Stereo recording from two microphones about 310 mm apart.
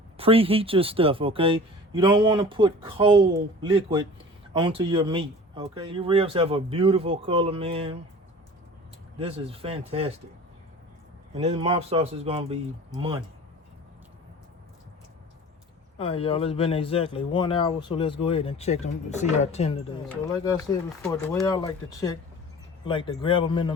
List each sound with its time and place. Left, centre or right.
0.2 s speech: centre
9.1 s speech: centre
11.3 s speech: centre
16.0 s speech: centre